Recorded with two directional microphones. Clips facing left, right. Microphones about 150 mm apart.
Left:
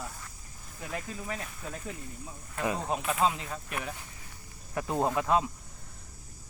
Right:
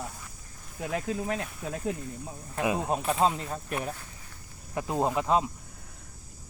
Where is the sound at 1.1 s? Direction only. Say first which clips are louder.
Right 7 dB; 60° right (ahead or behind).